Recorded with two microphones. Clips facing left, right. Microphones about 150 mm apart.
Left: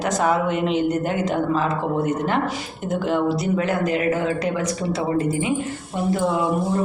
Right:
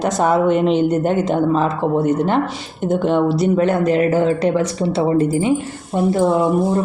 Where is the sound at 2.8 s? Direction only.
25° right (ahead or behind).